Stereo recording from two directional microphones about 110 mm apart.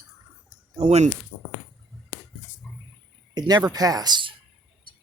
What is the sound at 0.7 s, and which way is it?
Speech, 90° right.